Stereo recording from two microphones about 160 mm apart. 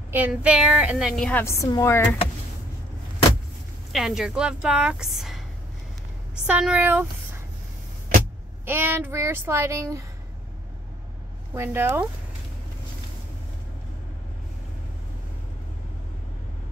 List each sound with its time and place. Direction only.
0.1 s speech: 10° right (ahead or behind)
1.4 s a woman's voice: 20° left (ahead or behind)
3.9 s a woman's voice: centre (ahead or behind)
6.4 s speech: 5° right (ahead or behind)
8.6 s speech: 15° right (ahead or behind)
11.5 s speech: 15° right (ahead or behind)